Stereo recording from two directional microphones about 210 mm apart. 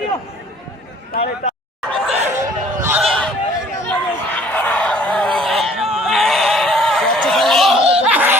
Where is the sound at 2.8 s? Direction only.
5° right (ahead or behind).